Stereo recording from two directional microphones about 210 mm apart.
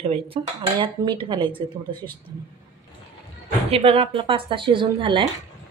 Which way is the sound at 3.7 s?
25° right (ahead or behind).